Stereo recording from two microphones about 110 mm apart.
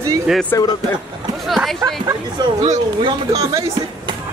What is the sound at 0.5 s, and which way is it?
Speech, 30° left (ahead or behind).